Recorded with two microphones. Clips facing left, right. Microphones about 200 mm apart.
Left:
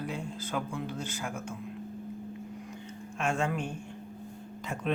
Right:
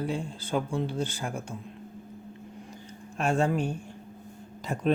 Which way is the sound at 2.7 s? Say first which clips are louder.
Left 2 dB; 35° right (ahead or behind).